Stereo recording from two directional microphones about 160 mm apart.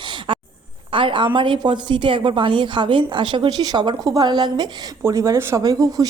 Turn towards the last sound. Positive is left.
turn(degrees=-25)  # may be behind; listen again after turning